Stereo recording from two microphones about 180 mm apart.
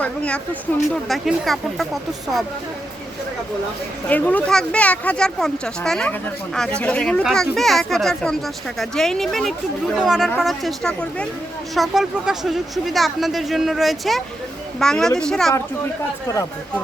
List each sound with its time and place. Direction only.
0.0 s speech: 5° left (ahead or behind)
4.1 s speech: 10° left (ahead or behind)
16.2 s speech: 20° left (ahead or behind)